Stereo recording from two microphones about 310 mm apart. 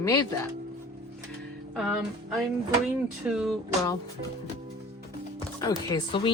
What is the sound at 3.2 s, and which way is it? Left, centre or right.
Speech, centre.